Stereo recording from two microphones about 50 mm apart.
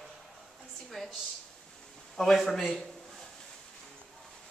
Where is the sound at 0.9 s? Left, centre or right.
Centre.